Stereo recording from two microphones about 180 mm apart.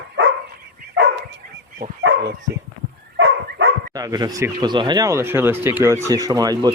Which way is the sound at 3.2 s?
90° right.